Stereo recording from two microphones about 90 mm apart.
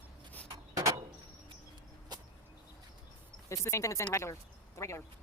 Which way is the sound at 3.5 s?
35° left (ahead or behind).